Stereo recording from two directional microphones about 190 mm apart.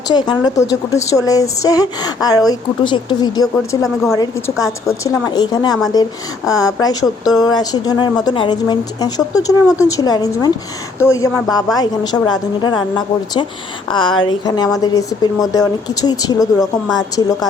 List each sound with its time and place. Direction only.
0.1 s a woman's voice: 25° left (ahead or behind)